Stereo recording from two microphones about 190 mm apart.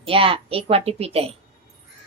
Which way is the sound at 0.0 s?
30° right (ahead or behind).